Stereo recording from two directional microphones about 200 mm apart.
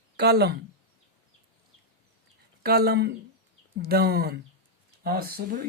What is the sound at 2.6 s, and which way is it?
Speech, 50° right (ahead or behind).